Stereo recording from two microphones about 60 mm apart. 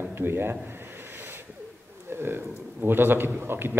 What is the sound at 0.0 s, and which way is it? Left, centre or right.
Speech, right.